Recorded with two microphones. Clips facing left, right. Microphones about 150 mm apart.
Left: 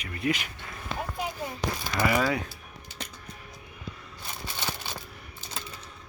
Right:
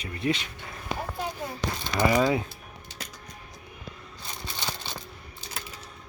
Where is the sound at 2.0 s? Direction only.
20° right (ahead or behind).